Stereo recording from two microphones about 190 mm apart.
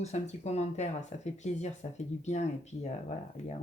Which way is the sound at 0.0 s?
35° left (ahead or behind).